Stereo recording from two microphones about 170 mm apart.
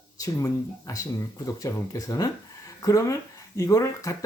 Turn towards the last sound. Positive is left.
turn(degrees=20)  # may be behind; listen again after turning